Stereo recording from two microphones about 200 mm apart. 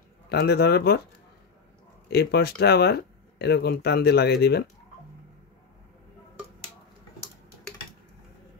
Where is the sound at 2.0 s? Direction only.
55° left (ahead or behind).